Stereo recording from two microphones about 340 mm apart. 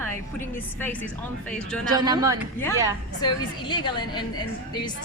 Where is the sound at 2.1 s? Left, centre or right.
Centre.